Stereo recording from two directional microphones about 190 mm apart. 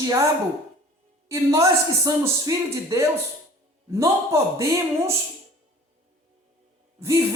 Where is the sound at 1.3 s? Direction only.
15° right (ahead or behind).